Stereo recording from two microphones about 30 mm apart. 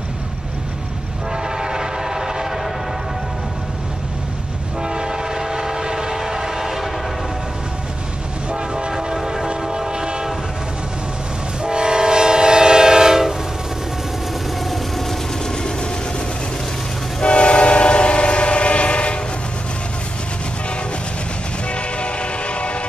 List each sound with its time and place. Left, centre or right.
1.3 s train: right
4.8 s train: right
8.9 s train: centre
11.6 s train: right
14.6 s vehicle: centre
15.4 s vehicle: left
17.2 s train: left
21.6 s music: left